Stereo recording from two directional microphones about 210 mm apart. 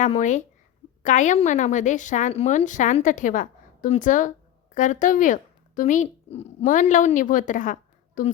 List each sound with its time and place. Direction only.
0.0 s a woman's voice: 35° left (ahead or behind)